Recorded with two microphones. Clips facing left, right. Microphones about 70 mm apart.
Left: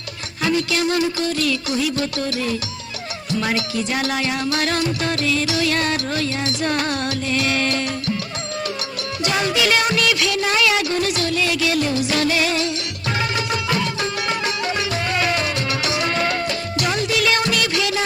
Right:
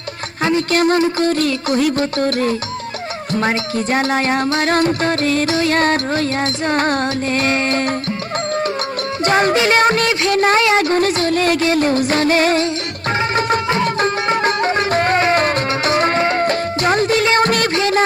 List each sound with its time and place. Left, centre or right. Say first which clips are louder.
0.4 s speech: right 5 dB; right
9.2 s speech: right 6 dB; right
13.3 s music: right 6 dB; right